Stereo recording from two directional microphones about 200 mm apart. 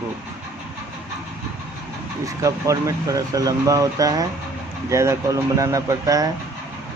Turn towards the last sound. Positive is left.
turn(degrees=-15)  # may be behind; listen again after turning